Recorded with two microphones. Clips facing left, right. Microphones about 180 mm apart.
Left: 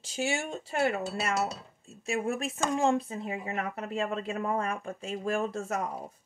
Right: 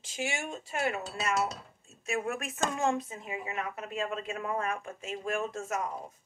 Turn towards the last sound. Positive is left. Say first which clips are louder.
# left 3 dB
turn(degrees=35)  # may be behind; listen again after turning